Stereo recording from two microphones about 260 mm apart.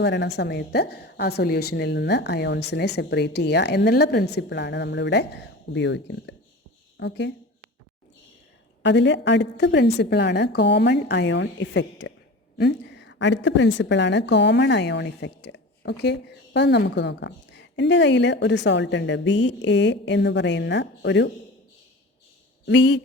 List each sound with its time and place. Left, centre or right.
0.0 s a woman's voice: left
8.8 s a woman's voice: left
22.6 s speech: left